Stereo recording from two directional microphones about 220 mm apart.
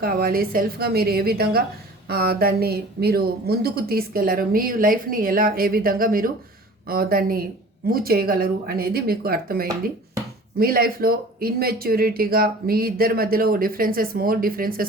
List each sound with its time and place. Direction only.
0.0 s a woman's voice: 45° right (ahead or behind)